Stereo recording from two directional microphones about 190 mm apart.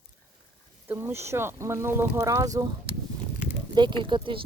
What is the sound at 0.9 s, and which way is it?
Speech, 10° right (ahead or behind).